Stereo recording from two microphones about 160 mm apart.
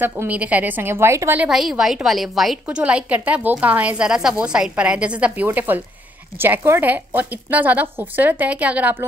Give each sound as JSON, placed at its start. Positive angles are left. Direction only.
{"t": 0.0, "sound": "a woman's voice", "side_deg": -10}